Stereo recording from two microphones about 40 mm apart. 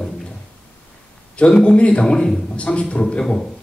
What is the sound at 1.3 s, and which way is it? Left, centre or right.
Speech, left.